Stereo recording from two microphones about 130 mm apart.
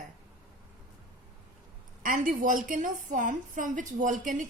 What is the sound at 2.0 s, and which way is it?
A woman's voice, 90° right.